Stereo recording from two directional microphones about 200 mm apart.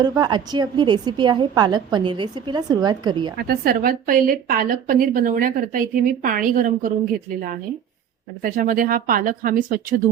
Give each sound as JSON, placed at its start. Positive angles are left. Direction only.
{"t": 0.0, "sound": "a woman's voice", "side_deg": -20}
{"t": 3.3, "sound": "a woman's voice", "side_deg": -50}
{"t": 8.4, "sound": "a woman's voice", "side_deg": -45}